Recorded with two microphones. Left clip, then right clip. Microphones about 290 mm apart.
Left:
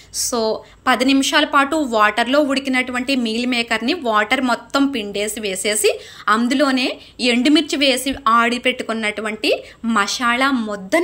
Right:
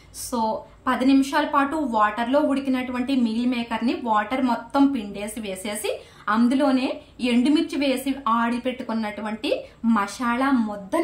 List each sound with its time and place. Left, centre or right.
0.8 s a woman's voice: centre